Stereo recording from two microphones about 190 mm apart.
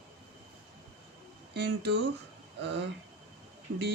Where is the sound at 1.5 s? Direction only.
60° right (ahead or behind).